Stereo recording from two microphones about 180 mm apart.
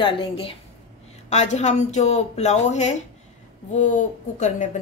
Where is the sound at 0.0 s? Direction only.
30° left (ahead or behind).